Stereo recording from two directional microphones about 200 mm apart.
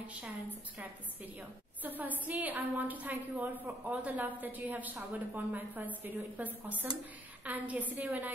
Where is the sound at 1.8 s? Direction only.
10° right (ahead or behind).